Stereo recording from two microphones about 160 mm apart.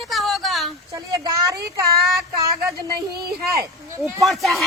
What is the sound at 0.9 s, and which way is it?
Speech, 25° right (ahead or behind).